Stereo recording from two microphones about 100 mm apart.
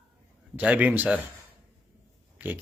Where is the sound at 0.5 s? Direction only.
15° right (ahead or behind).